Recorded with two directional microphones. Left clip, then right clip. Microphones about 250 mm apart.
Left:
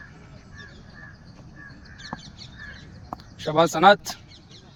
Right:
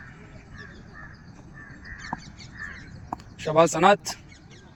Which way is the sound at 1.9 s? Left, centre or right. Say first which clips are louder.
Right 3 dB; centre.